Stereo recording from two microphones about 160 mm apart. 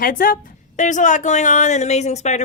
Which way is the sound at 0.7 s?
50° left (ahead or behind).